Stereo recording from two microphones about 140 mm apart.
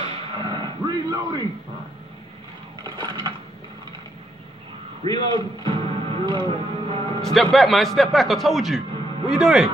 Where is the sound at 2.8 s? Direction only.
35° right (ahead or behind).